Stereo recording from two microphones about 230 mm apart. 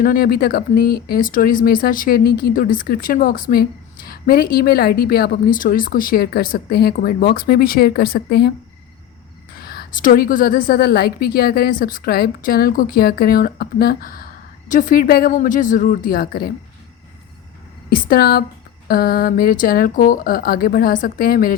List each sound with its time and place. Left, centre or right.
0.0 s speech: left
9.6 s speech: left
17.8 s speech: left